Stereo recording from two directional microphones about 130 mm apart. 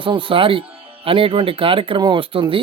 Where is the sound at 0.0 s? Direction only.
40° right (ahead or behind).